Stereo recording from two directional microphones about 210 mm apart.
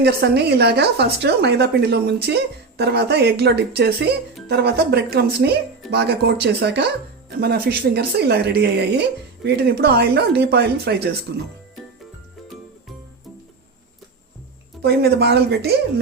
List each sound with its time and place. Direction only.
0.0 s speech: 50° right (ahead or behind)
14.8 s speech: 50° right (ahead or behind)